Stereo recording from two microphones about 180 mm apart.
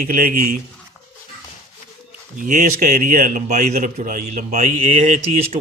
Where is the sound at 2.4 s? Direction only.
50° right (ahead or behind).